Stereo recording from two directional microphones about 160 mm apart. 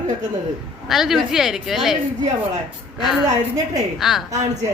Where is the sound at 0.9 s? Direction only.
Centre (ahead or behind).